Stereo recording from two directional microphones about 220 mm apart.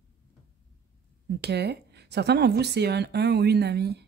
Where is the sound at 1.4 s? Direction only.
50° right (ahead or behind).